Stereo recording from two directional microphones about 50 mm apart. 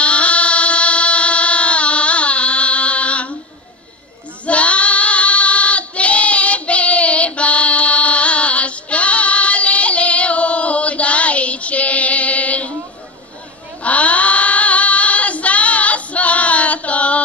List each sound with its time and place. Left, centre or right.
0.0 s a sound: left
4.5 s child singing: left
13.8 s child singing: left